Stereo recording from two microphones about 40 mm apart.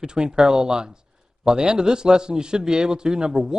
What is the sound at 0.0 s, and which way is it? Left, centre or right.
A man's voice, centre.